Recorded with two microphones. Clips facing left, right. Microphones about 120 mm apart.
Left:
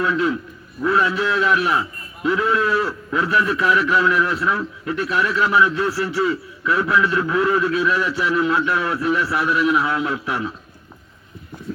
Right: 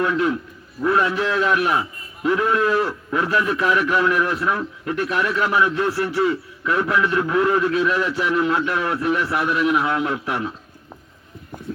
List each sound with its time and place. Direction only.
0.9 s a man's voice: 55° right (ahead or behind)